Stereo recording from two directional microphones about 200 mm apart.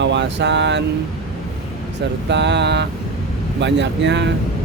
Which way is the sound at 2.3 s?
60° right (ahead or behind).